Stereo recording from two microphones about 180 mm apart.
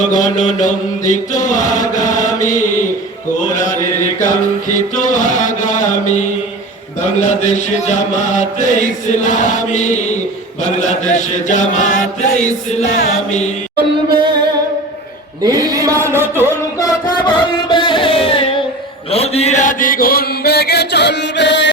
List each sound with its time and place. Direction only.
0.0 s mantra: 45° left (ahead or behind)
15.4 s chant: 20° right (ahead or behind)
16.5 s a sound: 20° left (ahead or behind)
19.1 s mantra: 35° left (ahead or behind); by 21.7 s 75° left (ahead or behind)